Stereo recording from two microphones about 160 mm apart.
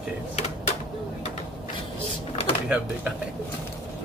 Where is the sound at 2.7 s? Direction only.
5° right (ahead or behind).